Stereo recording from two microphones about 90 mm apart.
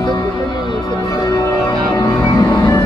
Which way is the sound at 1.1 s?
40° left (ahead or behind).